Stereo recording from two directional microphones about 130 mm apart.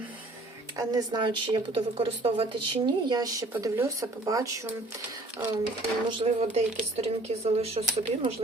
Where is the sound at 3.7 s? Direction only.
25° right (ahead or behind).